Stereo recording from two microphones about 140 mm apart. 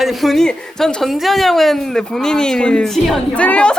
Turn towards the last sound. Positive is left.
turn(degrees=10)  # may be behind; listen again after turning